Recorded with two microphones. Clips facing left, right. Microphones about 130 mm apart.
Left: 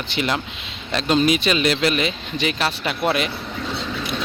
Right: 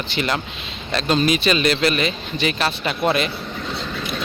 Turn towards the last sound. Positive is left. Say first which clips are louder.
# right 1 dB
turn(degrees=5)  # may be behind; listen again after turning